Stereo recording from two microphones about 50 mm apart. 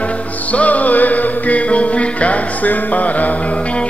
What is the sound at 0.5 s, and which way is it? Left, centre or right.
Music, left.